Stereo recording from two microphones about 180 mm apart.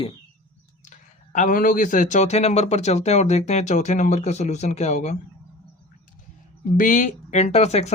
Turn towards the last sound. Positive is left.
turn(degrees=35)  # may be behind; listen again after turning